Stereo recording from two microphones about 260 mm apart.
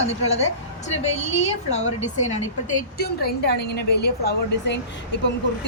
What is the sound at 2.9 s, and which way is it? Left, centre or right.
A woman's voice, left.